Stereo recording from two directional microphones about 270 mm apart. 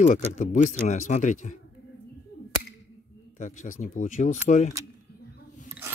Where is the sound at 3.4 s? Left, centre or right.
Left.